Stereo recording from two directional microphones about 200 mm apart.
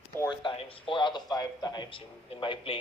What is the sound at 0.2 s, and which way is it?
A man's voice, 25° left (ahead or behind).